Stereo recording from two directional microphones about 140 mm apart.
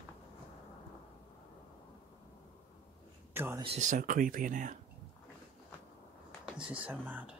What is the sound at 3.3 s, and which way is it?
Speech, 15° right (ahead or behind).